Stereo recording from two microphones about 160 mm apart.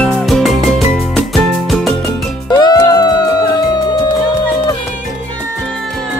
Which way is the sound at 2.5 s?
25° left (ahead or behind).